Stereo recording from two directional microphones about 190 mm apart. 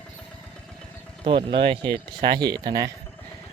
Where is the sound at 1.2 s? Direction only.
25° right (ahead or behind).